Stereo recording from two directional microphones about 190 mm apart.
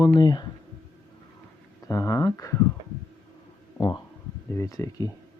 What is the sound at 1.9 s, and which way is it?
Speech, 15° left (ahead or behind).